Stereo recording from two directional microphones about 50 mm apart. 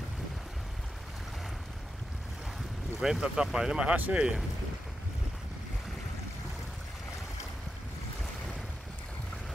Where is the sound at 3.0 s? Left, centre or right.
Centre.